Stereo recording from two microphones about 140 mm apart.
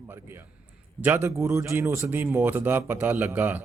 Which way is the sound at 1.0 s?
15° right (ahead or behind).